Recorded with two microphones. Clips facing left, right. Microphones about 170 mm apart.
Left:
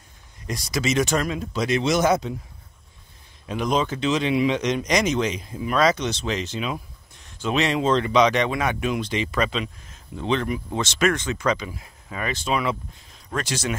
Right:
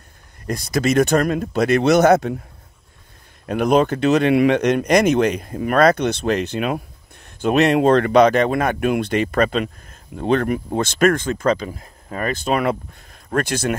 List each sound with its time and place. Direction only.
0.5 s speech: 55° right (ahead or behind)
3.4 s speech: 60° right (ahead or behind)